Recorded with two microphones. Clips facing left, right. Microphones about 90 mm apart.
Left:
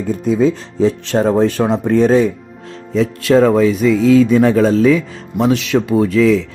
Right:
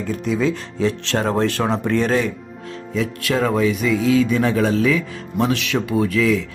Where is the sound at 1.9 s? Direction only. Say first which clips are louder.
Left 8 dB; 70° right (ahead or behind).